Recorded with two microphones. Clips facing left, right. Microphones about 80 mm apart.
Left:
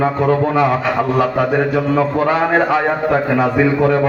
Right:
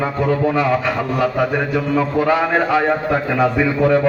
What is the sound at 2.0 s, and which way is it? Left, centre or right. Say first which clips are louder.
A man's voice: right 1 dB; left.